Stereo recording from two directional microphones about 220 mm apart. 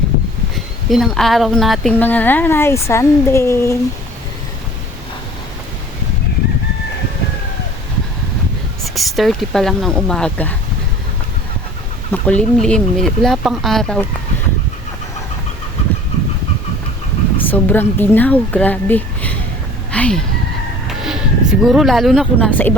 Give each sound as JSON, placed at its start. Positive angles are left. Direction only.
{"t": 0.5, "sound": "speech", "side_deg": 0}
{"t": 9.0, "sound": "speech", "side_deg": 0}
{"t": 12.1, "sound": "speech", "side_deg": 5}
{"t": 17.4, "sound": "speech", "side_deg": 10}